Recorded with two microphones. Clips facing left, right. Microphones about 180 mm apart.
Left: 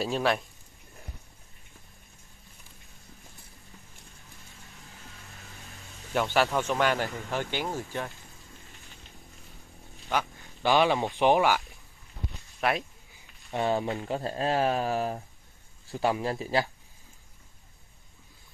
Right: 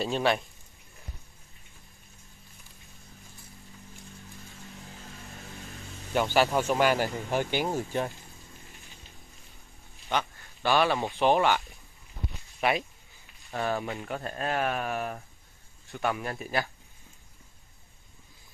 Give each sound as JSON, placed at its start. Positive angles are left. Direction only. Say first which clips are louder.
{"t": 0.0, "sound": "a man's voice", "louder": "even", "side_deg": 0}
{"t": 6.1, "sound": "a man's voice", "louder": "right 1 dB", "side_deg": 0}
{"t": 7.1, "sound": "speech", "louder": "right 3 dB", "side_deg": -20}
{"t": 9.9, "sound": "a sound", "louder": "even", "side_deg": 0}
{"t": 10.4, "sound": "speech", "louder": "left 2 dB", "side_deg": 15}
{"t": 12.5, "sound": "a sound", "louder": "right 1 dB", "side_deg": 0}
{"t": 13.5, "sound": "speech", "louder": "left 3 dB", "side_deg": 20}